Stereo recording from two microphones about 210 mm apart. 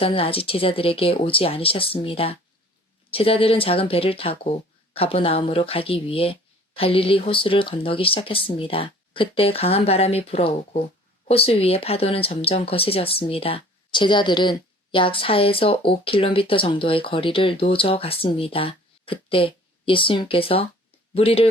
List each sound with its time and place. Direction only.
0.0 s speech: 25° left (ahead or behind)